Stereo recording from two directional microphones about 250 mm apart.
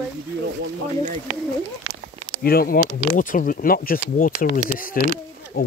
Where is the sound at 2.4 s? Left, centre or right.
Left.